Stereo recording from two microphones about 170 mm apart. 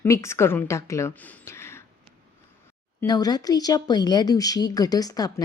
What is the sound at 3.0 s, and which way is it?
A woman's voice, 20° left (ahead or behind).